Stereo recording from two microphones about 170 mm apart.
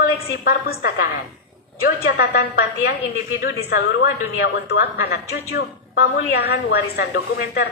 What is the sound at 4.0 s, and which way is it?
A woman's voice, 75° left (ahead or behind).